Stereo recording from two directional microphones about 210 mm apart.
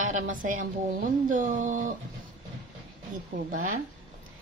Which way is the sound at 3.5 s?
40° right (ahead or behind).